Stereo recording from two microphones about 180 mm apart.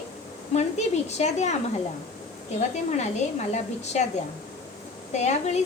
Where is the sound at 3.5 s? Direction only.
40° left (ahead or behind).